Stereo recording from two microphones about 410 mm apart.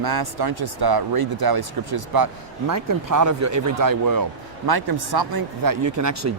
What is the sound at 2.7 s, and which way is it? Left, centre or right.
Speech, right.